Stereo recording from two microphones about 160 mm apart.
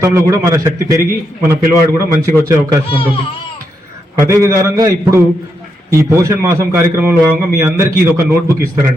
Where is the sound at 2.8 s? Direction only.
35° left (ahead or behind).